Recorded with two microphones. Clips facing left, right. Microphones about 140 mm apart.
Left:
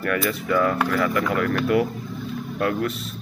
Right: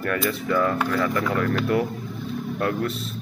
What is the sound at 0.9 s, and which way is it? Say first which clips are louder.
Speech: left 1 dB; 25° right (ahead or behind).